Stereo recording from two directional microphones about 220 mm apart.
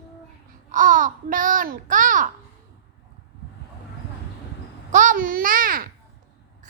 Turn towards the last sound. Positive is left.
turn(degrees=-40)  # may be behind; listen again after turning